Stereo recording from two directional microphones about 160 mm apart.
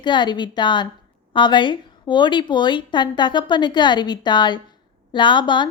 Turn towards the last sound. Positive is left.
turn(degrees=30)  # may be behind; listen again after turning